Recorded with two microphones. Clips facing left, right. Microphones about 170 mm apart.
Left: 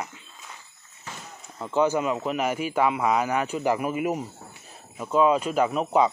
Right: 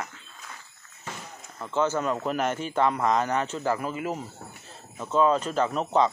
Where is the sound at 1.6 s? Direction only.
15° left (ahead or behind).